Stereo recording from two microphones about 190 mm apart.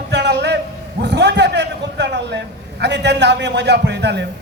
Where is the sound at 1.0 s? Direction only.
65° right (ahead or behind).